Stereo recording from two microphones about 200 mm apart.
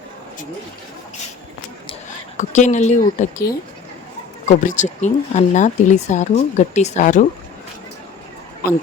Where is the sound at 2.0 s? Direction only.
35° left (ahead or behind).